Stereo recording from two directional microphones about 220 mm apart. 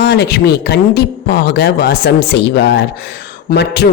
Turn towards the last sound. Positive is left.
turn(degrees=50)  # may be behind; listen again after turning